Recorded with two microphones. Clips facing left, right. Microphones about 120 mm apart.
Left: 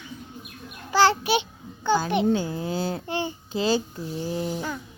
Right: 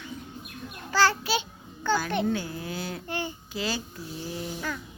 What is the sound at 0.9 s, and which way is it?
Babbling, 20° left (ahead or behind).